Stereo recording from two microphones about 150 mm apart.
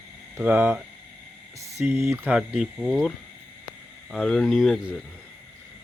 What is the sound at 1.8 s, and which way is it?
Speech, 15° right (ahead or behind).